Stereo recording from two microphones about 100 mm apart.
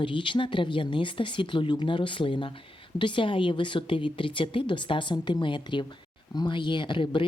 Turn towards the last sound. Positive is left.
turn(degrees=55)  # may be behind; listen again after turning